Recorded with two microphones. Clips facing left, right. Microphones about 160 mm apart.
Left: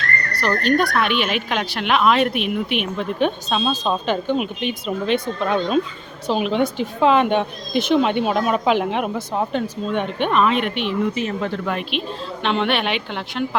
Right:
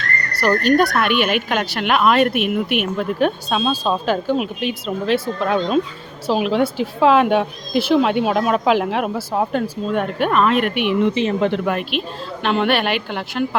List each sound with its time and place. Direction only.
0.3 s a woman's voice: 5° right (ahead or behind)
11.0 s speech: 25° right (ahead or behind)
11.6 s a woman's voice: 5° right (ahead or behind)